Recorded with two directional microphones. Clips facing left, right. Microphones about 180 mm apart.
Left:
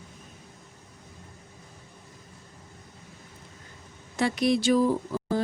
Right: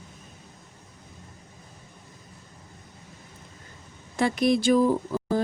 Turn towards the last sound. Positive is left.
turn(degrees=-50)  # may be behind; listen again after turning